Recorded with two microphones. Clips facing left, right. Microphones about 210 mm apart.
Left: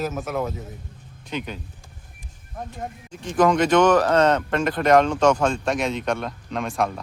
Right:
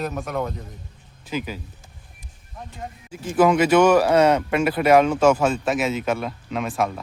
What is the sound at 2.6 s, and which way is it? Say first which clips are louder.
Speech: left 5 dB; 50° left (ahead or behind).